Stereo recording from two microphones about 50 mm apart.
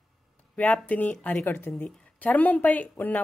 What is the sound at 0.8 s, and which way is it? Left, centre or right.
Speech, left.